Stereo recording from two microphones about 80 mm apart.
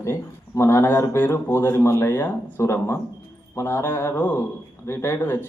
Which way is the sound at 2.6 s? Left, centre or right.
Left.